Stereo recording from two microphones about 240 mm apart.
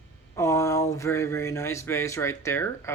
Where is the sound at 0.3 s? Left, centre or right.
Centre.